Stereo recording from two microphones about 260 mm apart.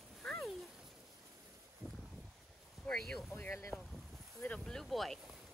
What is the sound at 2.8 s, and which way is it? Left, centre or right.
Boat, centre.